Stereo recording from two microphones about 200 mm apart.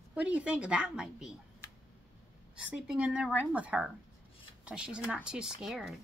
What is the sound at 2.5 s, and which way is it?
Speech, 5° right (ahead or behind).